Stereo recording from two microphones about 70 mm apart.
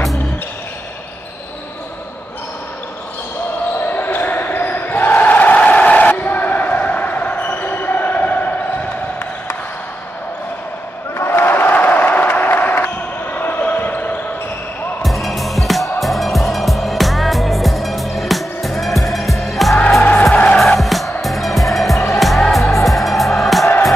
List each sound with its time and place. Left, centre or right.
3.8 s basketball bounce: left
11.1 s crowd: left
15.0 s music: centre